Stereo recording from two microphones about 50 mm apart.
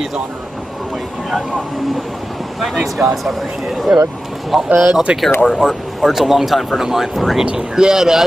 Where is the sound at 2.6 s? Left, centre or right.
Centre.